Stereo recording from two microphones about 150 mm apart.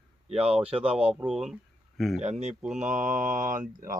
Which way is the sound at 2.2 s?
50° right (ahead or behind).